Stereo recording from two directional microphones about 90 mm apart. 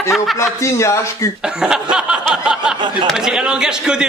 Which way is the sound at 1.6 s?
5° right (ahead or behind).